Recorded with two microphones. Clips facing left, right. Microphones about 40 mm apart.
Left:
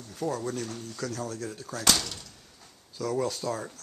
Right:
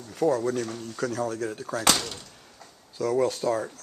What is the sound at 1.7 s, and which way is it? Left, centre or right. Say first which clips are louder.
Speech: right 2 dB; centre.